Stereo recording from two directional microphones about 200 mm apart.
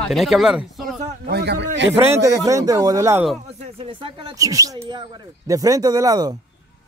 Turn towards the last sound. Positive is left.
turn(degrees=-20)  # may be behind; listen again after turning